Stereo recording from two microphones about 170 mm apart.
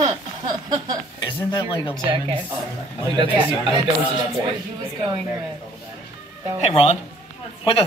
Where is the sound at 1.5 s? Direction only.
30° left (ahead or behind).